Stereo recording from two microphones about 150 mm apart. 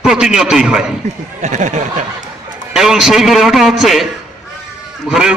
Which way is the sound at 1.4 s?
55° right (ahead or behind).